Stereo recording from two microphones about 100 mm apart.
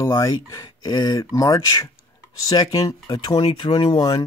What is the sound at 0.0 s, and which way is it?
Speech, 30° left (ahead or behind).